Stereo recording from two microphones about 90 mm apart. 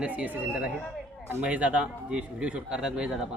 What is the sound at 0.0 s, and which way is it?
Speech, 15° right (ahead or behind).